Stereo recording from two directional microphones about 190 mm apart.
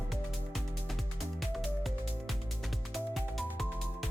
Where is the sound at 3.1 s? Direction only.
Centre (ahead or behind).